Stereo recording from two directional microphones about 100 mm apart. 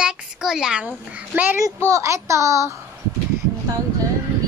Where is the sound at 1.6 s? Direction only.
30° right (ahead or behind).